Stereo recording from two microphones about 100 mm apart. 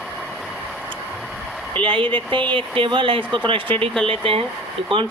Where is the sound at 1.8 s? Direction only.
60° right (ahead or behind).